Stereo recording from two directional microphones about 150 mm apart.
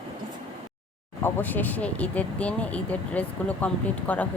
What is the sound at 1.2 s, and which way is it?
Speech, 10° left (ahead or behind).